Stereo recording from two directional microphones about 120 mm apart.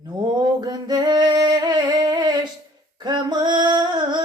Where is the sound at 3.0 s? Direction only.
40° right (ahead or behind).